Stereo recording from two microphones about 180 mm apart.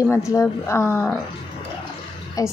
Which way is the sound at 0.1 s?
15° left (ahead or behind).